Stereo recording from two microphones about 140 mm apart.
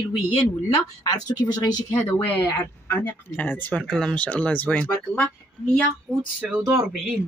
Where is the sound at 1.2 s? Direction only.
30° left (ahead or behind).